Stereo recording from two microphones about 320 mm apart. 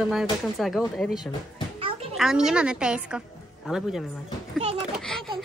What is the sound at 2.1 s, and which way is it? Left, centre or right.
A woman's voice, centre.